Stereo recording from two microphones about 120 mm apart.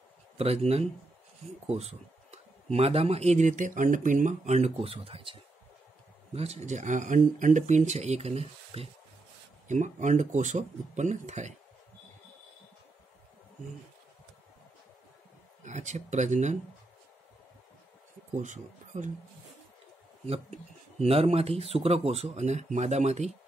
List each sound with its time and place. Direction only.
0.4 s speech: 60° right (ahead or behind)
6.3 s speech: 65° right (ahead or behind)
9.7 s speech: 90° right
15.6 s speech: 80° right
18.3 s speech: 90° right
21.0 s speech: 55° right (ahead or behind)